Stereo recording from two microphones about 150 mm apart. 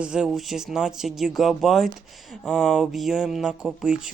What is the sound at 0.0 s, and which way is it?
Speech, 5° right (ahead or behind).